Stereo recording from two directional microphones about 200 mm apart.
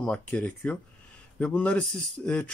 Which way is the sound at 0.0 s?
5° left (ahead or behind).